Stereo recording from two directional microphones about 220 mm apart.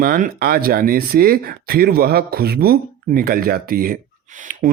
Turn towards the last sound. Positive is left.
turn(degrees=-40)  # may be behind; listen again after turning